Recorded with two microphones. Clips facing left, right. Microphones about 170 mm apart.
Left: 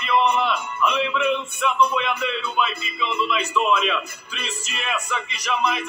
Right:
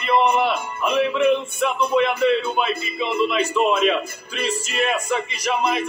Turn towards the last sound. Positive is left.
turn(degrees=-40)  # may be behind; listen again after turning